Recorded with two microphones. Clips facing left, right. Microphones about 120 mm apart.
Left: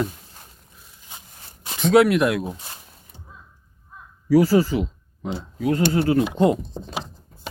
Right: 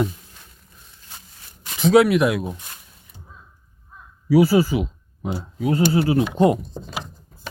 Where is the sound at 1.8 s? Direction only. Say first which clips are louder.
Right 1 dB; centre (ahead or behind).